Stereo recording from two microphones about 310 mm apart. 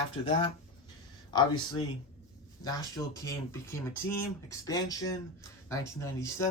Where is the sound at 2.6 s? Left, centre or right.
Centre.